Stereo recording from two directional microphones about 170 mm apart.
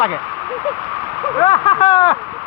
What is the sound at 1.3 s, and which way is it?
Speech, 30° left (ahead or behind).